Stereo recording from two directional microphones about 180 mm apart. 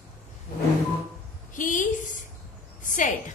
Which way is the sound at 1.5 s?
45° left (ahead or behind).